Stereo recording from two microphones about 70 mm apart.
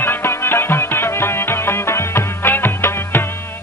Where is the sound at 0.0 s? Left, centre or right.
Left.